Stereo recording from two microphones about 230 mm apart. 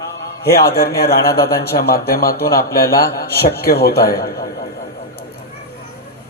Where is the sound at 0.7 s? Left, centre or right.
Left.